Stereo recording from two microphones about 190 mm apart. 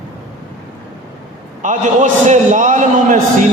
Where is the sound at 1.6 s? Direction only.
40° right (ahead or behind).